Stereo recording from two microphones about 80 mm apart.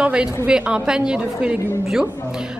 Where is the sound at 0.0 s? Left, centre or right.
Centre.